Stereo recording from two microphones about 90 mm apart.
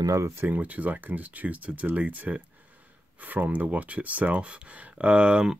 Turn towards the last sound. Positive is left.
turn(degrees=-10)  # may be behind; listen again after turning